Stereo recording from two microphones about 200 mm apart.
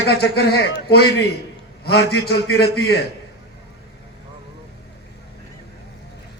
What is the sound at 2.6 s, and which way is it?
Speech, 55° left (ahead or behind).